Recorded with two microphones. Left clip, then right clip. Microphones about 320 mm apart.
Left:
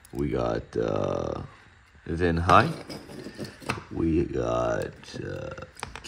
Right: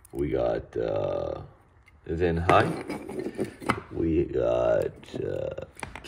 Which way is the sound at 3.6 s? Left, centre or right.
Centre.